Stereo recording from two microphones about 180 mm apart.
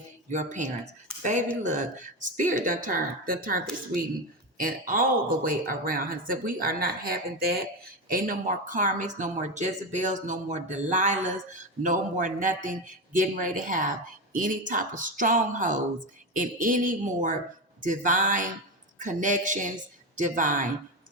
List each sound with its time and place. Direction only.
0.3 s speech: 45° right (ahead or behind)